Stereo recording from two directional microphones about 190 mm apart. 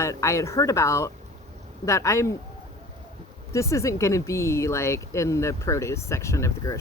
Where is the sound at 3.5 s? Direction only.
15° left (ahead or behind).